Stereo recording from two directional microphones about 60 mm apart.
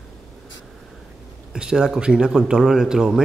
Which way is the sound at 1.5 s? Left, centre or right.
Centre.